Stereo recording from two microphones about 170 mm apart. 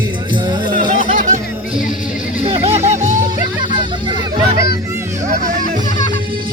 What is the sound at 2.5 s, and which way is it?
Music, 35° right (ahead or behind).